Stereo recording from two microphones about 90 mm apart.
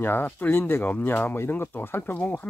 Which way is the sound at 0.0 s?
20° left (ahead or behind).